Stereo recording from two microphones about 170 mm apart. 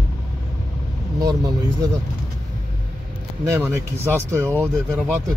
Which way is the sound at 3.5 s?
15° right (ahead or behind).